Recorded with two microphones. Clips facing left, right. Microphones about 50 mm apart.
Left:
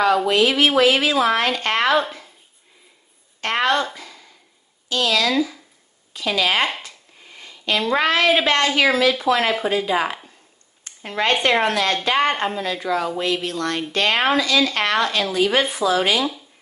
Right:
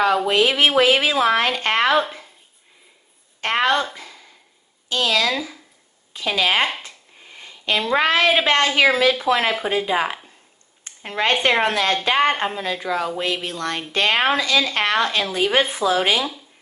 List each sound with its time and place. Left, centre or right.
0.3 s speech: right
3.3 s a woman's voice: right
7.3 s a sound: right
7.9 s speech: right